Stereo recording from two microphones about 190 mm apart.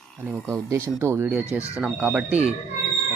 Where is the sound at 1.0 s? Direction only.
15° right (ahead or behind).